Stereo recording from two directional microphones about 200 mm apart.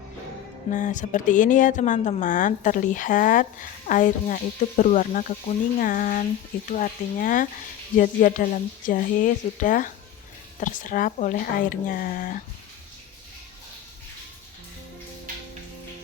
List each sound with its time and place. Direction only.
0.7 s speech: 40° left (ahead or behind)